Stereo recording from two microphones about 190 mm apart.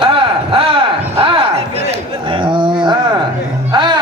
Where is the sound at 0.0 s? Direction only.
25° right (ahead or behind).